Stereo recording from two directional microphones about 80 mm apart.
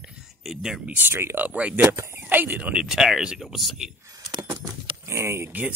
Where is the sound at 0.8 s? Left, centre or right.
Right; by 3.9 s centre.